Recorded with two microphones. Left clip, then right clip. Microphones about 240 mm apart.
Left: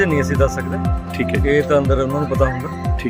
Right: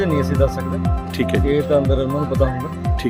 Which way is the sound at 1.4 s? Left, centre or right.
Centre.